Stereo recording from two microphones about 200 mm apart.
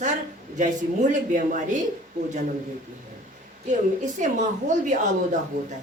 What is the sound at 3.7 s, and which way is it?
Speech, 35° right (ahead or behind).